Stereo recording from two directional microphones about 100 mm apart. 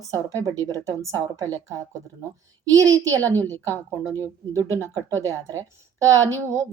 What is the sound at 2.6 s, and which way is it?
A woman's voice, 35° right (ahead or behind).